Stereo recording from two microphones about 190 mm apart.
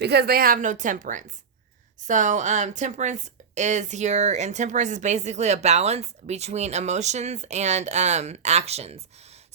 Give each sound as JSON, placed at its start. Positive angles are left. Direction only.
{"t": 0.0, "sound": "a woman's voice", "side_deg": -60}